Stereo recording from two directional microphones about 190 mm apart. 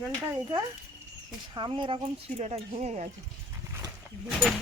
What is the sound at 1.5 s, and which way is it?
A woman's voice, 25° right (ahead or behind).